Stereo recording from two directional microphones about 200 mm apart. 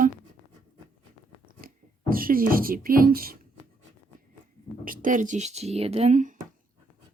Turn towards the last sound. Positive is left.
turn(degrees=-35)  # may be behind; listen again after turning